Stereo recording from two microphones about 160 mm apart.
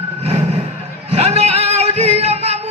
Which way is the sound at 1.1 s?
40° right (ahead or behind).